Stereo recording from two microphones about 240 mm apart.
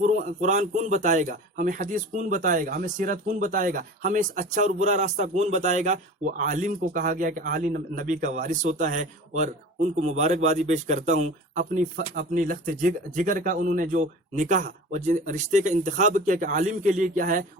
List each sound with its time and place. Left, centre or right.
0.0 s a man's voice: right